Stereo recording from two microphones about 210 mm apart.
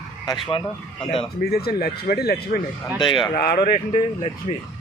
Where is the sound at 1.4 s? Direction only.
50° left (ahead or behind).